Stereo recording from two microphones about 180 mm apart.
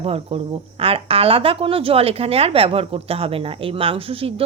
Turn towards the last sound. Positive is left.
turn(degrees=-30)  # may be behind; listen again after turning